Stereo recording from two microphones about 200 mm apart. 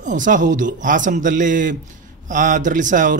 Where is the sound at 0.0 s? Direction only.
40° right (ahead or behind).